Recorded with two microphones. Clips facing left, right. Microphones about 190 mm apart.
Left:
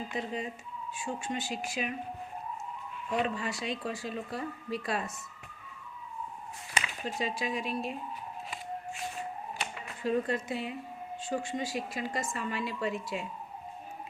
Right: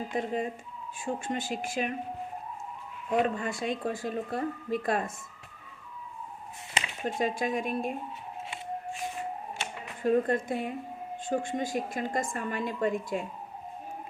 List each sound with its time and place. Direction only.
0.1 s speech: 50° right (ahead or behind)
3.1 s speech: 50° right (ahead or behind)
7.2 s speech: 50° right (ahead or behind)
10.0 s speech: 50° right (ahead or behind)